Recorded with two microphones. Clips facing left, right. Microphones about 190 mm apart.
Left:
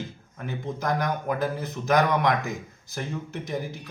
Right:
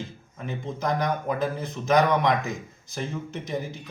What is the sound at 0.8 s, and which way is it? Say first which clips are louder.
Speech: right 1 dB; centre (ahead or behind).